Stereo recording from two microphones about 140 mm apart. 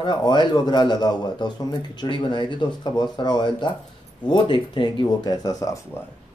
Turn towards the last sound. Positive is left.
turn(degrees=25)  # may be behind; listen again after turning